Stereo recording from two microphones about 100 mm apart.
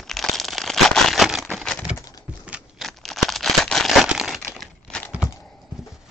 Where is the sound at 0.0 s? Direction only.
5° left (ahead or behind).